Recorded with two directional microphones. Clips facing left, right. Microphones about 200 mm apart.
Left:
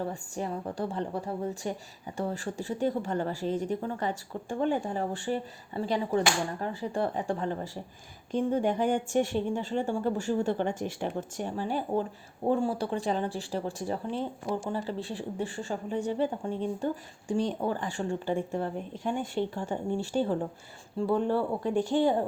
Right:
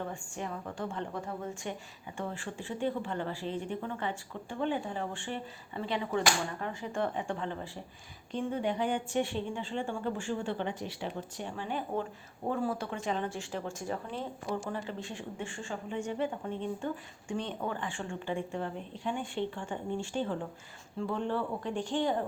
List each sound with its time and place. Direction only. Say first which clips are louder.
0.0 s speech: left 5 dB; 35° left (ahead or behind)
21.8 s speech: left 7 dB; 10° left (ahead or behind)